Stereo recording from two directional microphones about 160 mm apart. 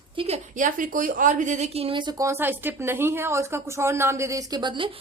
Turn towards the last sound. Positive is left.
turn(degrees=-30)  # may be behind; listen again after turning